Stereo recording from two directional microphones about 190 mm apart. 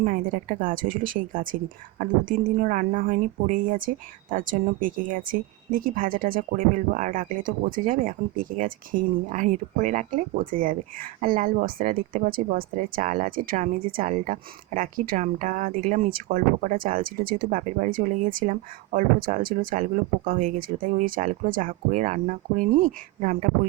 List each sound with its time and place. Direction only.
0.0 s speech: 45° right (ahead or behind)